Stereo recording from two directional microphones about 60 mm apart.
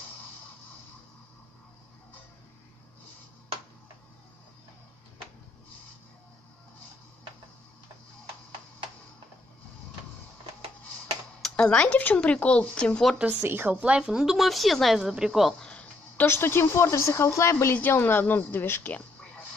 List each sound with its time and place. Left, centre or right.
11.5 s speech: centre
13.4 s a woman's voice: right
13.7 s a woman's voice: right
15.6 s a sound: centre
16.3 s a woman's voice: left
17.7 s speech: left